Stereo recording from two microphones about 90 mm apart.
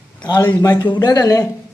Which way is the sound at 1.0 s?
45° left (ahead or behind).